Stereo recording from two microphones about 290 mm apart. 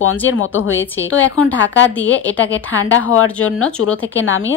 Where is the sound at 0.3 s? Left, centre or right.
Left.